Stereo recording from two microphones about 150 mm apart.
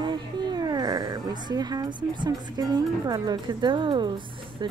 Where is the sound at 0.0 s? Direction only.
30° right (ahead or behind).